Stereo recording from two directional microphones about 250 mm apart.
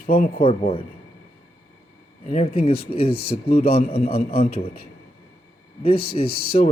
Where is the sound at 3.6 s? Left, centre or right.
Left.